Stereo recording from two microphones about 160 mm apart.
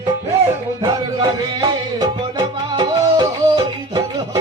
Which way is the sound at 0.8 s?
25° right (ahead or behind).